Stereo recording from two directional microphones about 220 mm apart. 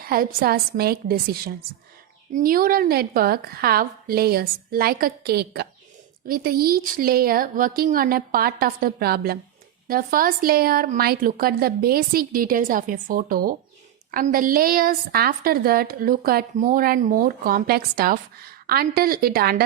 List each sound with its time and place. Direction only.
0.0 s a woman's voice: 40° right (ahead or behind)